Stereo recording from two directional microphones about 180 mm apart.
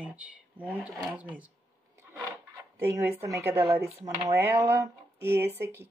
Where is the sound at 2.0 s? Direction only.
15° right (ahead or behind).